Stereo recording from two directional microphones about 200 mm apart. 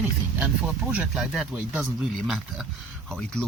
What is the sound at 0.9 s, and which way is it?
Speech, 5° right (ahead or behind).